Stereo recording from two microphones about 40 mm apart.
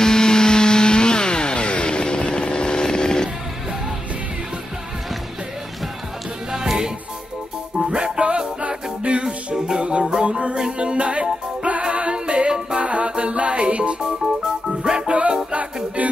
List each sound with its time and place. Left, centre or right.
0.0 s music: centre
6.5 s music: centre
14.2 s music: centre